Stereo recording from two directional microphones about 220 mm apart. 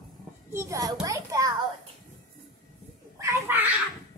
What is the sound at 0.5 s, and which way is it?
Children playing, 15° right (ahead or behind).